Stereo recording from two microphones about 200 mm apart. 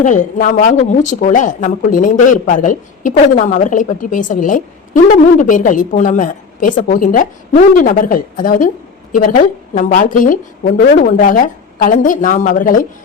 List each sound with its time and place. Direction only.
0.0 s speech: 40° left (ahead or behind)